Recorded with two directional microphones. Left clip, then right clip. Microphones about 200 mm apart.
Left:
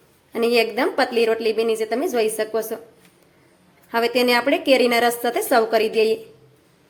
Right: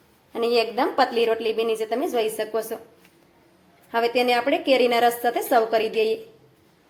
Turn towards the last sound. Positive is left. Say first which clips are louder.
# left 3 dB
turn(degrees=10)  # may be behind; listen again after turning